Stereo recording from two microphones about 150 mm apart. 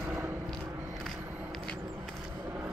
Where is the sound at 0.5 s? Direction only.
Centre (ahead or behind).